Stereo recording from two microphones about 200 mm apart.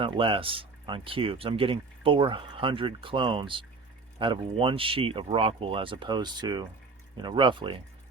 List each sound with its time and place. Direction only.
0.0 s speech: 25° right (ahead or behind)